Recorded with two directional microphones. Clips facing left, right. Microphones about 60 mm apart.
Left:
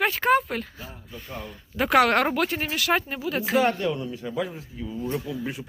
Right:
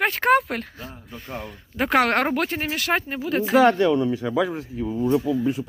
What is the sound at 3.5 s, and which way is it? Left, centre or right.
Speech, right.